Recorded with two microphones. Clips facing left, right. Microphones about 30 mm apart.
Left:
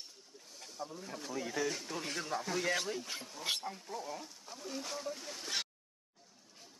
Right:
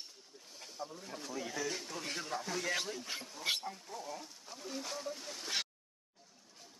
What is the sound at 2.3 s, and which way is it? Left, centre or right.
Speech, left.